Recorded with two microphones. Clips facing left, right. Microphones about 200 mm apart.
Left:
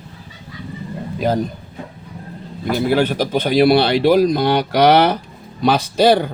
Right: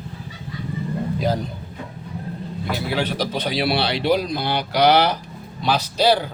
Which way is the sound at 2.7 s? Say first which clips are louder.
Left 8 dB; 50° left (ahead or behind).